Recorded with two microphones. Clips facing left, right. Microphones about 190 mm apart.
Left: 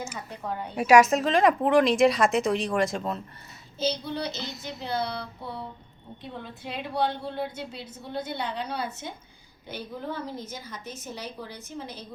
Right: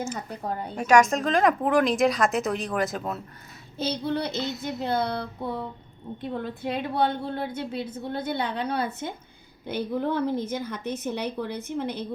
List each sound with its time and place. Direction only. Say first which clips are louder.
0.8 s speech: left 2 dB; 5° left (ahead or behind)
3.8 s a woman's voice: right 2 dB; 55° right (ahead or behind)